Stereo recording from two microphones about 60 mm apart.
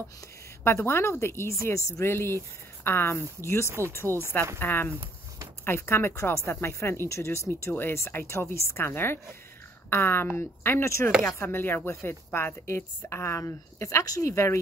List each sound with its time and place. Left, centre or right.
0.7 s speech: left
2.0 s speech: left
3.6 s speech: right
3.9 s speech: left
7.7 s speech: left
11.1 s speech: centre
11.3 s speech: left
12.3 s a woman's voice: left
12.6 s speech: left
14.0 s speech: left
14.3 s speech: left